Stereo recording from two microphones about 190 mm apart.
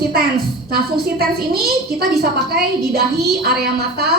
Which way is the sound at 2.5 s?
55° right (ahead or behind).